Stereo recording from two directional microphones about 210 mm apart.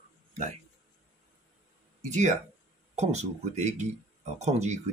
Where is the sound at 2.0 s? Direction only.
35° right (ahead or behind).